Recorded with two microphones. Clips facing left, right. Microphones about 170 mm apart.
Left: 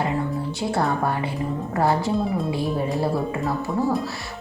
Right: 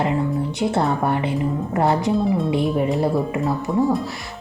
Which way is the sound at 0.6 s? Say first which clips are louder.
Right 2 dB; 20° right (ahead or behind).